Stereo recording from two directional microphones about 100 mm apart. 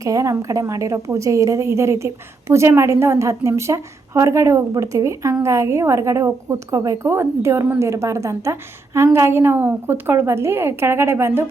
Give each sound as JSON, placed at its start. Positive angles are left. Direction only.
{"t": 0.0, "sound": "a woman's voice", "side_deg": -35}